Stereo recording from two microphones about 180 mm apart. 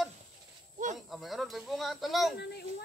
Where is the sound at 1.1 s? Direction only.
Centre (ahead or behind).